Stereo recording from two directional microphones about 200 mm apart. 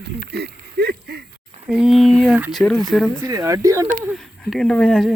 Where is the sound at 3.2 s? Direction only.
15° right (ahead or behind).